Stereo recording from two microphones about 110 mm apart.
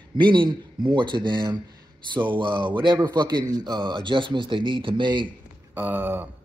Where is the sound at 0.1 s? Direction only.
45° right (ahead or behind).